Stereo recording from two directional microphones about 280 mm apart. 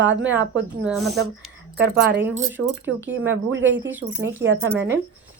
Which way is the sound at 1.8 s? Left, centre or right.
Right.